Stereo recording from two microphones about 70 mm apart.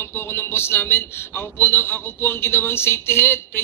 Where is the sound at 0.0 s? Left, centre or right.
Left.